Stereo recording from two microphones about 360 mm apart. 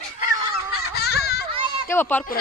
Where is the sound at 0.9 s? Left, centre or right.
Left.